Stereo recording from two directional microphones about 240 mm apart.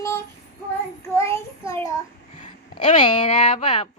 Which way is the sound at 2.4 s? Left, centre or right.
Left.